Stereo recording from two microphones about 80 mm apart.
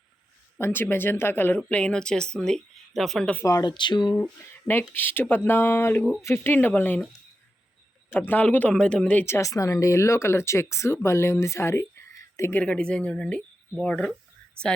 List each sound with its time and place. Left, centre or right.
0.6 s speech: left; by 3.2 s centre
3.6 s speech: left
4.7 s speech: left
8.2 s speech: centre
9.2 s speech: left
12.6 s speech: centre